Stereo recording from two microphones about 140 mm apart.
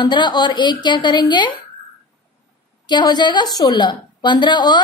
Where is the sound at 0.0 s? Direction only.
35° left (ahead or behind).